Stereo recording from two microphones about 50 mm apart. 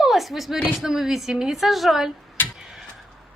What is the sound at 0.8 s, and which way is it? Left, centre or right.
A woman's voice, centre.